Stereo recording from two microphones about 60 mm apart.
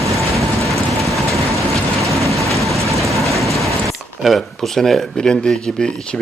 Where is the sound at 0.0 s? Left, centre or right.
Right.